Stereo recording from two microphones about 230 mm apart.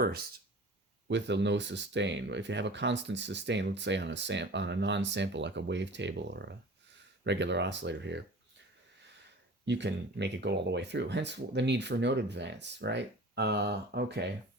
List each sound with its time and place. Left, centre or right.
1.0 s speech: right
9.6 s speech: right